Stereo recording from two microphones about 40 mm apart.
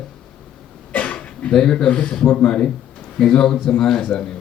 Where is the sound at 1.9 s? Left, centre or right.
Left.